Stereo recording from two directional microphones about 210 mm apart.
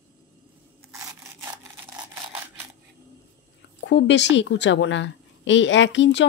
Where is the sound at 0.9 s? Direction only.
15° right (ahead or behind).